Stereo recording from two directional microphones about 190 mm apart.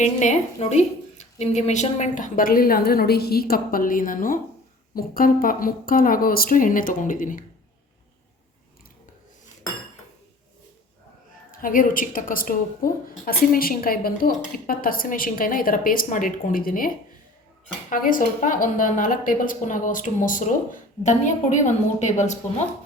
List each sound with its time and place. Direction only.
0.0 s a woman's voice: 40° left (ahead or behind)
11.5 s a woman's voice: 45° left (ahead or behind)